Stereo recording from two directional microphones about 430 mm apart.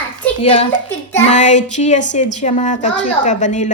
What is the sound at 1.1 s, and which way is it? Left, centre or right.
A child's voice, centre.